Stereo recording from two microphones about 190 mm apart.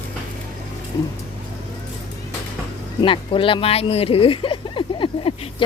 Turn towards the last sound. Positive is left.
turn(degrees=25)  # may be behind; listen again after turning